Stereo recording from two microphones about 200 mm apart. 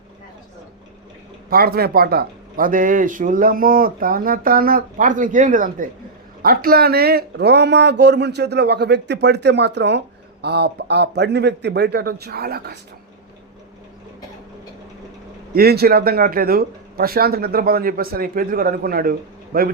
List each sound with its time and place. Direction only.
1.5 s speech: 50° right (ahead or behind)
15.5 s speech: 50° right (ahead or behind)